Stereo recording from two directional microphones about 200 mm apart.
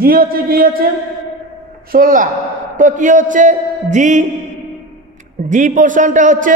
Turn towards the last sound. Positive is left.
turn(degrees=-40)  # may be behind; listen again after turning